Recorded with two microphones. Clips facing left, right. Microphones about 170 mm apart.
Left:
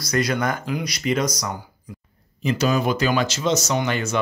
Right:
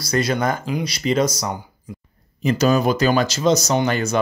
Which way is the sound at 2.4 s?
40° right (ahead or behind).